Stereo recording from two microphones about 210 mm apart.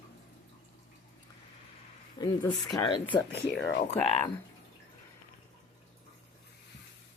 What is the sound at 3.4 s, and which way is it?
Speech, 55° left (ahead or behind).